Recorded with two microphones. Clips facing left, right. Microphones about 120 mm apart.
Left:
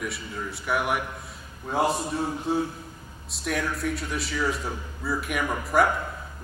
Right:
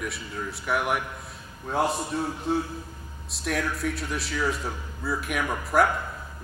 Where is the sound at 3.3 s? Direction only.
Centre (ahead or behind).